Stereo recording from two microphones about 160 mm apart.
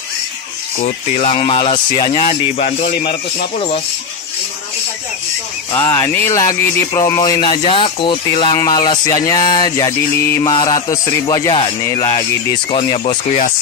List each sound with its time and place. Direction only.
0.8 s speech: 40° left (ahead or behind)
5.8 s speech: 20° left (ahead or behind)
12.7 s speech: 35° left (ahead or behind)